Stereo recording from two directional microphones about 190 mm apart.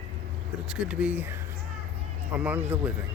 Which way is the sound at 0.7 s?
5° right (ahead or behind).